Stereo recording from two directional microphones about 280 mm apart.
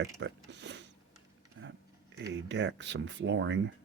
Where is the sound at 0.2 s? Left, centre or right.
Right.